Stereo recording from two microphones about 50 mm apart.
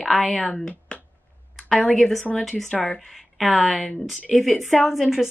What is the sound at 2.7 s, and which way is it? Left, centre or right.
Speech, left.